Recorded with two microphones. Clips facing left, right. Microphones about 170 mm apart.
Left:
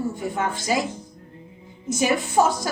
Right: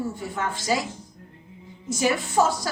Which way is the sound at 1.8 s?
15° left (ahead or behind).